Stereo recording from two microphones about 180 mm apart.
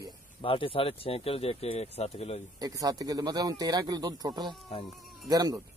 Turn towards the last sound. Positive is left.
turn(degrees=-20)  # may be behind; listen again after turning